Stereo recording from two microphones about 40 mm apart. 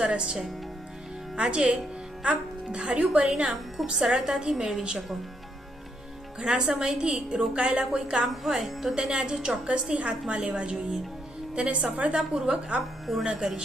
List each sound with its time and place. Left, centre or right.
0.0 s a woman's voice: right
1.4 s a woman's voice: right
4.0 s a woman's voice: centre
6.4 s a woman's voice: centre
8.4 s a woman's voice: centre
9.0 s a woman's voice: centre
13.2 s a woman's voice: centre